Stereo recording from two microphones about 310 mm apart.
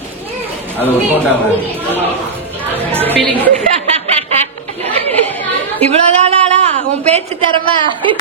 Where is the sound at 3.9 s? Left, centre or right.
Centre.